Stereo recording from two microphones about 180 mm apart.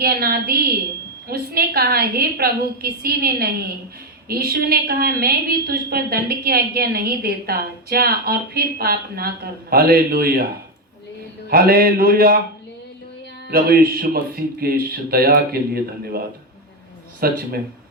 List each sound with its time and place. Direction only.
0.0 s a woman's voice: 55° right (ahead or behind)
11.4 s a woman's voice: 55° right (ahead or behind)
13.5 s a woman's voice: 55° right (ahead or behind)